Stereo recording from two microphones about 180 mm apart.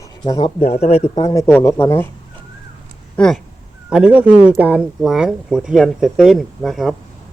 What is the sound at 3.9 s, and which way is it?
Speech, 5° right (ahead or behind).